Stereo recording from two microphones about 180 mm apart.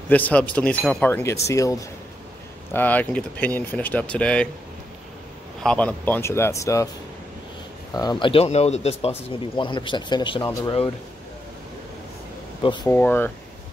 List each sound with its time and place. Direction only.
0.1 s speech: 10° left (ahead or behind)
5.6 s speech: 5° left (ahead or behind)
7.9 s speech: 20° left (ahead or behind)
9.6 s speech: 25° left (ahead or behind)
12.8 s speech: 10° left (ahead or behind)